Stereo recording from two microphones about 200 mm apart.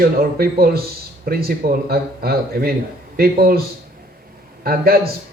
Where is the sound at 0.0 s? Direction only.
50° right (ahead or behind).